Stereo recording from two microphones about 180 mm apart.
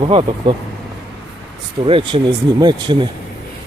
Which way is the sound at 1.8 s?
30° right (ahead or behind).